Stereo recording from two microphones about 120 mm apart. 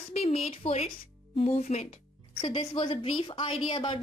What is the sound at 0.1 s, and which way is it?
Speech, 60° left (ahead or behind).